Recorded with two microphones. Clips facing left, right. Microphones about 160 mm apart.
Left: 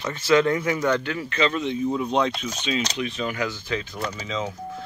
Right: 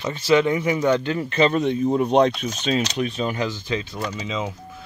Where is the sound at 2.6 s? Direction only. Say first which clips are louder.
Right 4 dB; 40° right (ahead or behind).